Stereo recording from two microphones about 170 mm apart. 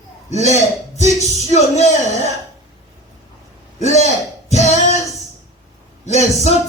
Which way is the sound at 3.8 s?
40° left (ahead or behind).